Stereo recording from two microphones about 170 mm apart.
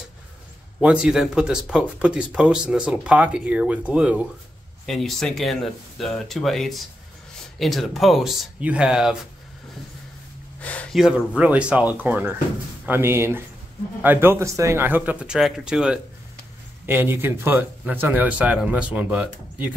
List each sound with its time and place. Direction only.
0.7 s speech: 5° right (ahead or behind)
10.6 s speech: 10° left (ahead or behind); by 19.7 s 10° right (ahead or behind)